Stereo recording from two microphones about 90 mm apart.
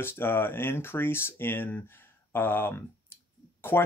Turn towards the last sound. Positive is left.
turn(degrees=25)  # may be behind; listen again after turning